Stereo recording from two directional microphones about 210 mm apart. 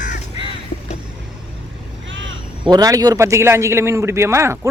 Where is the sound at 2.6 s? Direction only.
20° right (ahead or behind).